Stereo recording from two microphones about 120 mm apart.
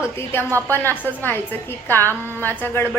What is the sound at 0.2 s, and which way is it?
A woman's voice, 20° left (ahead or behind).